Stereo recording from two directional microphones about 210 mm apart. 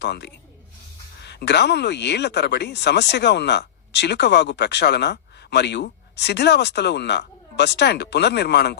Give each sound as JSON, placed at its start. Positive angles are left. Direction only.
{"t": 0.0, "sound": "speech", "side_deg": 55}